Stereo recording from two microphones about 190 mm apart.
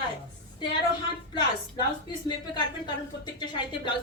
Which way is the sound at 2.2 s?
25° left (ahead or behind).